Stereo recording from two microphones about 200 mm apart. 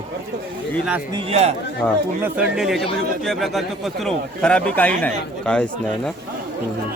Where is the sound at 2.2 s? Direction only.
5° right (ahead or behind).